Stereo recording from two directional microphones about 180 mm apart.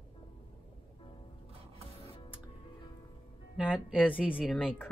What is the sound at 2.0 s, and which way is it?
Music, 30° left (ahead or behind).